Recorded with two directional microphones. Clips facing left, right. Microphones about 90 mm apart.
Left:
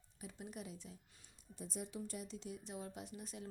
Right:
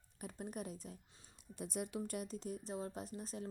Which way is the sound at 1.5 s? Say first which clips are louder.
Right 4 dB; 60° right (ahead or behind).